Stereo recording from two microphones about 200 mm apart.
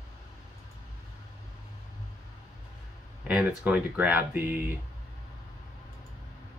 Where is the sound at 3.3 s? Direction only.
5° right (ahead or behind).